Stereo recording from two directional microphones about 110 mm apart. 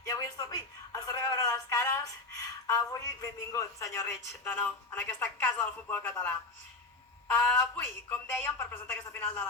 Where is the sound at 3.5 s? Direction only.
25° left (ahead or behind).